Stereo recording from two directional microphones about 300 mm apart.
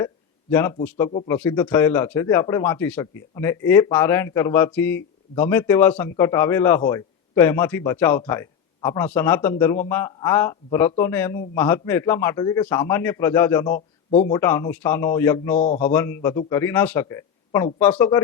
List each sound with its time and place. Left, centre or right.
0.5 s a man's voice: centre
13.7 s a sound: left
14.3 s a man's voice: centre
15.5 s speech: left
15.8 s a man's voice: centre